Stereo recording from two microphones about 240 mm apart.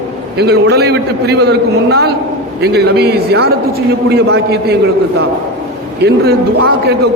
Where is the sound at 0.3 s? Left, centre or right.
Right.